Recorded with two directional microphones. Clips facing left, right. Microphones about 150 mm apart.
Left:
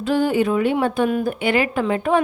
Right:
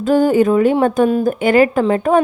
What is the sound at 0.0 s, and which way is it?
A woman's voice, 45° right (ahead or behind).